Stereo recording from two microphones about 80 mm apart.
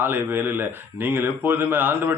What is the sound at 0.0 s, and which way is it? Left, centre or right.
Speech, right.